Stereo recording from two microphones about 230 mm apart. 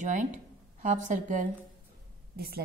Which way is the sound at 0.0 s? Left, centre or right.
Right.